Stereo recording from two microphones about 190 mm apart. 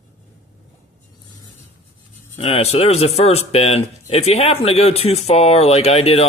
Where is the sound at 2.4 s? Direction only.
30° left (ahead or behind).